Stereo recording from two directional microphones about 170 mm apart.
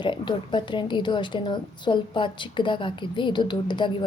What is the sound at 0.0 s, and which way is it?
A woman's voice, 30° left (ahead or behind).